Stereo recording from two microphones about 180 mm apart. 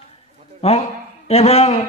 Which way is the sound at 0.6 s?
35° left (ahead or behind).